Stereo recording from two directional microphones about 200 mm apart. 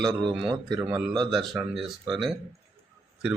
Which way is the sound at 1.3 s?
Centre (ahead or behind).